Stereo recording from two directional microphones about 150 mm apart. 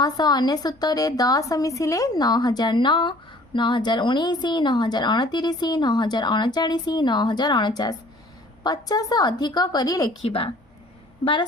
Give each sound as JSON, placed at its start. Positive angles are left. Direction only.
{"t": 0.0, "sound": "a woman's voice", "side_deg": 25}
{"t": 10.2, "sound": "a woman's voice", "side_deg": 40}